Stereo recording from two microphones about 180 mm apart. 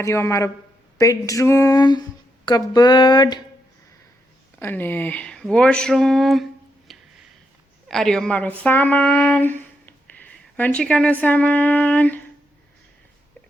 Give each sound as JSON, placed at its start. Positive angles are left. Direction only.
{"t": 0.0, "sound": "a man's voice", "side_deg": 15}
{"t": 4.6, "sound": "speech", "side_deg": 10}